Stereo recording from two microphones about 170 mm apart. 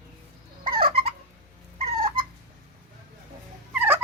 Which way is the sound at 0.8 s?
35° right (ahead or behind).